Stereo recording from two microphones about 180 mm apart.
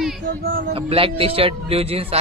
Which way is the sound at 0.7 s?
30° right (ahead or behind).